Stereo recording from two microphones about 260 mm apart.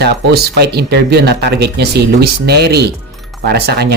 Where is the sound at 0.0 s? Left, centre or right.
Right.